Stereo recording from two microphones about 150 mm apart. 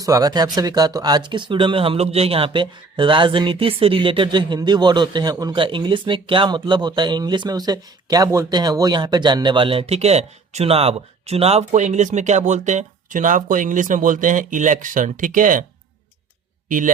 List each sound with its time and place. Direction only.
0.0 s speech: 25° right (ahead or behind); by 15.6 s 60° right (ahead or behind)
16.6 s a man's voice: 60° right (ahead or behind)